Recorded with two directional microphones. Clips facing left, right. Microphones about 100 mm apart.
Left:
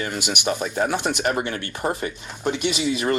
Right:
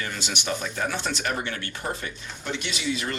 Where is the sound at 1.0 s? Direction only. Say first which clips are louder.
Left 5 dB; 15° left (ahead or behind).